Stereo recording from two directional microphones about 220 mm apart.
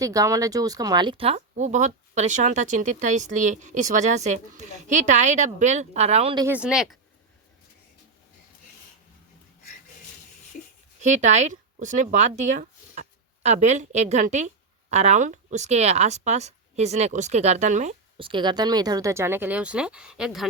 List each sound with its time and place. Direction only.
0.0 s speech: 15° right (ahead or behind)
6.4 s speech: 5° right (ahead or behind)
11.0 s speech: 30° right (ahead or behind); by 20.5 s centre (ahead or behind)